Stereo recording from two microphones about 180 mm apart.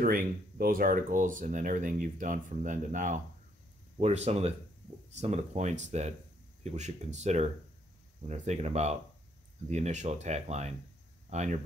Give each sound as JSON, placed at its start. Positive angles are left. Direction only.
{"t": 0.0, "sound": "speech", "side_deg": -50}